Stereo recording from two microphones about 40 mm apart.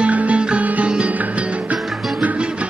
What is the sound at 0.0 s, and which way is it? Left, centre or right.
Music, right.